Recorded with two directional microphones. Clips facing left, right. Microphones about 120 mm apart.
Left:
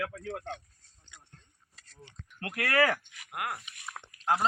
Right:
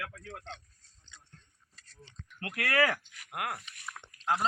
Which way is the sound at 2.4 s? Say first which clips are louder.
Left 2 dB; 30° left (ahead or behind).